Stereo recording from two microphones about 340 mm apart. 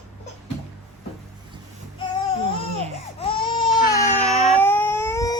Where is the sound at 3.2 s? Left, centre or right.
Centre.